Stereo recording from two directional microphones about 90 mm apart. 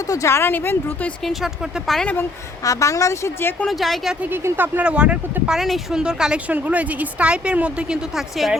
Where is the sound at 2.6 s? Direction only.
40° left (ahead or behind).